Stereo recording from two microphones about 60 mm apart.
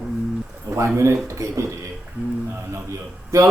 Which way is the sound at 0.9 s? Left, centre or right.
Right.